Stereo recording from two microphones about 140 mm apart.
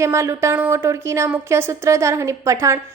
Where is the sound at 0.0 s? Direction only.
20° right (ahead or behind).